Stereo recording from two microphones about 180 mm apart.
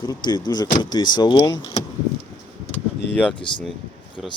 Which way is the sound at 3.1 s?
10° left (ahead or behind).